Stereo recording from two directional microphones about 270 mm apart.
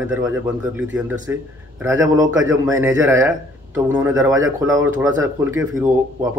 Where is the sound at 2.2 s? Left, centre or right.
Right.